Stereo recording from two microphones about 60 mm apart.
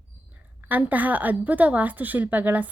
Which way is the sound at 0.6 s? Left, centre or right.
Right.